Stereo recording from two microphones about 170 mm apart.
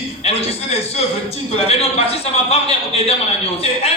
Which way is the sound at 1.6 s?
35° left (ahead or behind).